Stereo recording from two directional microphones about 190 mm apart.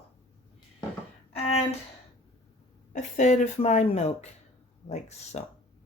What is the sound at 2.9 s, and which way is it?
Speech, 40° left (ahead or behind).